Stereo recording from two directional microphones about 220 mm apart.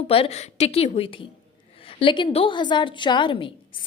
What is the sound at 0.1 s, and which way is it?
A woman's voice, 25° left (ahead or behind).